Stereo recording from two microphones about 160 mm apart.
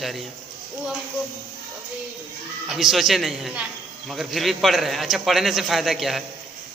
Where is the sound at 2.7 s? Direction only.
Centre (ahead or behind).